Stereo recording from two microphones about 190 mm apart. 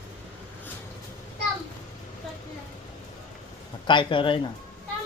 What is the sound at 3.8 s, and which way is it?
Speech, 25° left (ahead or behind).